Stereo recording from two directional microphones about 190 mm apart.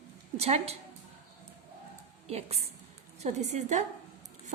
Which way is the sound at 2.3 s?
35° right (ahead or behind).